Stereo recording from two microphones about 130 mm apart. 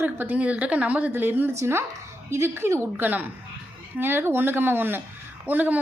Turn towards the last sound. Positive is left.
turn(degrees=-10)  # may be behind; listen again after turning